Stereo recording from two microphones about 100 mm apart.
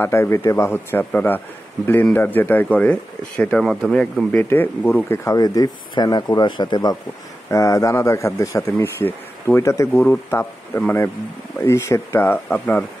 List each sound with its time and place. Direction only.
0.0 s speech: 25° left (ahead or behind); by 7.0 s 45° left (ahead or behind)
7.4 s speech: 30° left (ahead or behind); by 12.8 s 15° left (ahead or behind)